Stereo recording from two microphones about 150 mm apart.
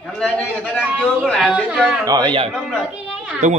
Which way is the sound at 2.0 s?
30° right (ahead or behind).